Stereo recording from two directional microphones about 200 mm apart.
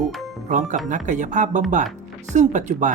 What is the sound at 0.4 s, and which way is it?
Speech, 35° right (ahead or behind).